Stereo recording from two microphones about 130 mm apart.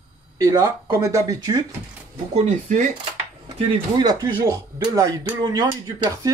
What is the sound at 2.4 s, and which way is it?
Speech, 65° right (ahead or behind).